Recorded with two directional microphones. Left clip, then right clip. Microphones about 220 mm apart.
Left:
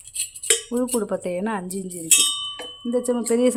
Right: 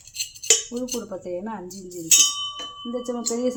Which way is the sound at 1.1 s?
40° left (ahead or behind).